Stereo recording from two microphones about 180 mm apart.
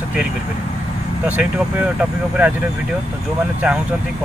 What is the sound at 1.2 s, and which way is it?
Speech, 10° right (ahead or behind).